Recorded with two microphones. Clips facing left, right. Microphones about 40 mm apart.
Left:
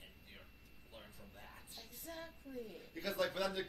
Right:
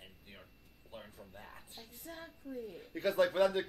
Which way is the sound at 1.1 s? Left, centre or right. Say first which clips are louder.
Right 4 dB; right.